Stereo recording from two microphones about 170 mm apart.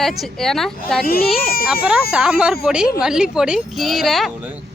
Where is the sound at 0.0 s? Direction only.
Centre (ahead or behind).